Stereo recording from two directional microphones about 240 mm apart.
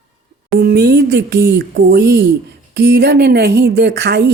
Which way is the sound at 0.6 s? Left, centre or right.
Right.